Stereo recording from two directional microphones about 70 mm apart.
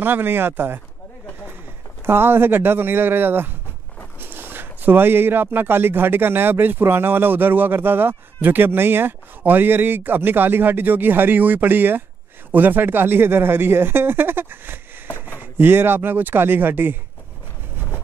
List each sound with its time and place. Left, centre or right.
0.0 s speech: right
2.0 s speech: right